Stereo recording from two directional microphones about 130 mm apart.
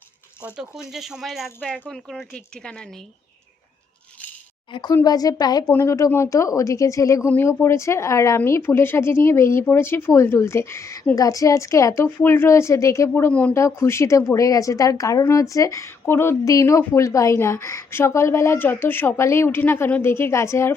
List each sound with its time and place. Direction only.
0.4 s speech: 5° right (ahead or behind)
4.7 s a woman's voice: 35° left (ahead or behind)